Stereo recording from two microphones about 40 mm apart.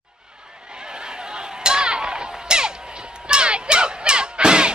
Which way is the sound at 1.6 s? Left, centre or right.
Centre.